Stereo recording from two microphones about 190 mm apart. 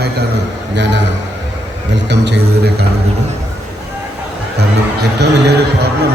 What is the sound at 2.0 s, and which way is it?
Speech, 65° right (ahead or behind).